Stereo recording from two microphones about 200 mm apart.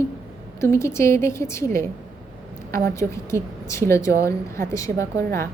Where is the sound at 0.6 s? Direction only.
15° left (ahead or behind).